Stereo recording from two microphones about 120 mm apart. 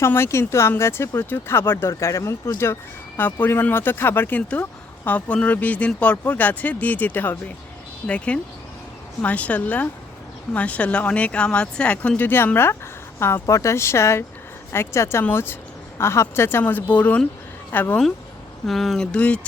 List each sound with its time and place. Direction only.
0.0 s speech: 20° left (ahead or behind)
18.6 s speech: centre (ahead or behind)